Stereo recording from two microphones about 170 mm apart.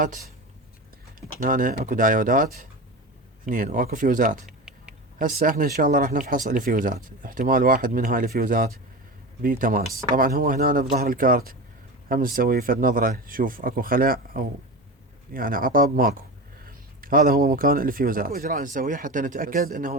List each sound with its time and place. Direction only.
1.4 s speech: 50° right (ahead or behind)
4.4 s a sound: 5° right (ahead or behind)
5.2 s speech: 55° right (ahead or behind)